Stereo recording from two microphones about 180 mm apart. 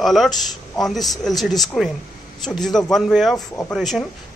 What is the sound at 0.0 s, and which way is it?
Speech, centre (ahead or behind).